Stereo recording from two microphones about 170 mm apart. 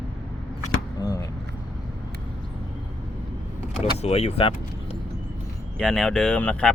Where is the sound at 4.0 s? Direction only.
40° left (ahead or behind).